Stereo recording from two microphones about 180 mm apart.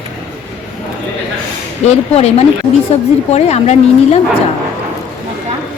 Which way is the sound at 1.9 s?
35° left (ahead or behind).